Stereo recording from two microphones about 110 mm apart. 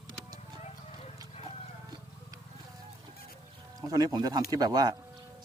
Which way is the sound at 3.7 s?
35° right (ahead or behind).